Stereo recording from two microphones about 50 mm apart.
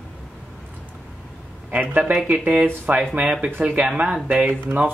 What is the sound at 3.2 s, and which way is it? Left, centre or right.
Speech, centre.